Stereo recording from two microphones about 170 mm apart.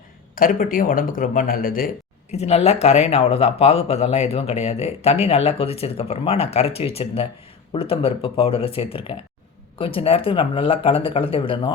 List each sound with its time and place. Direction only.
0.3 s speech: 55° left (ahead or behind)
2.3 s speech: 40° left (ahead or behind)